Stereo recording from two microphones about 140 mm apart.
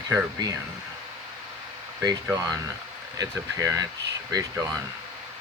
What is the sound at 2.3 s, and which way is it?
Speech, 25° right (ahead or behind).